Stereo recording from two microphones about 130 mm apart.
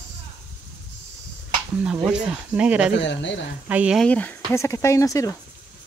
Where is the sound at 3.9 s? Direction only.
10° left (ahead or behind).